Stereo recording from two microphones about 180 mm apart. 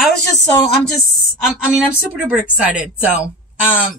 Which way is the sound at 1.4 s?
5° right (ahead or behind).